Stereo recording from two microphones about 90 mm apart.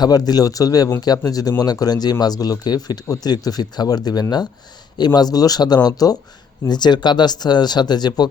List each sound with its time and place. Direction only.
0.0 s speech: 45° left (ahead or behind)